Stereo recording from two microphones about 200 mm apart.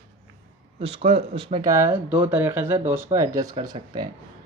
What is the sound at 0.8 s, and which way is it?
Speech, 30° right (ahead or behind).